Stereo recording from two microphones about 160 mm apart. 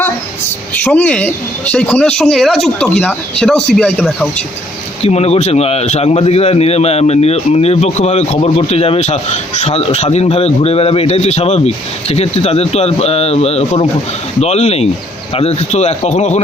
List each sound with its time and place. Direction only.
0.8 s a woman's voice: 10° left (ahead or behind)
5.0 s a man's voice: 40° left (ahead or behind)